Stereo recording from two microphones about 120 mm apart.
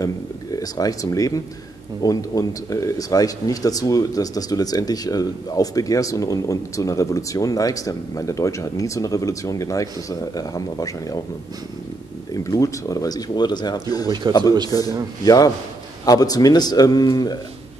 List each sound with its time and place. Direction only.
0.0 s speech: 30° left (ahead or behind)
12.4 s speech: 25° left (ahead or behind)